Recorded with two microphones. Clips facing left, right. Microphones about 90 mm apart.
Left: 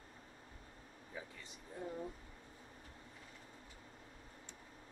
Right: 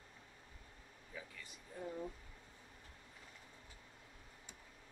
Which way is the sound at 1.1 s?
25° left (ahead or behind).